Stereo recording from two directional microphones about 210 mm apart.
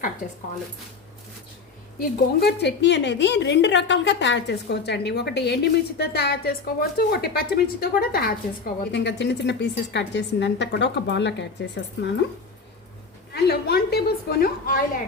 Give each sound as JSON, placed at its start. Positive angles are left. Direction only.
{"t": 0.2, "sound": "a woman's voice", "side_deg": 40}
{"t": 2.0, "sound": "a woman's voice", "side_deg": 50}
{"t": 13.3, "sound": "a sound", "side_deg": 50}